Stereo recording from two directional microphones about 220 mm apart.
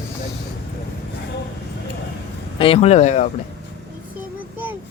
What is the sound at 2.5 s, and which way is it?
Speech, 25° left (ahead or behind).